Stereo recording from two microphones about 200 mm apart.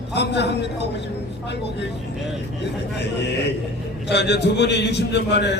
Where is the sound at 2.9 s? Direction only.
55° left (ahead or behind).